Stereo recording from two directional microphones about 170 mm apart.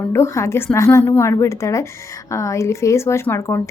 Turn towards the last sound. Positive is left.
turn(degrees=15)  # may be behind; listen again after turning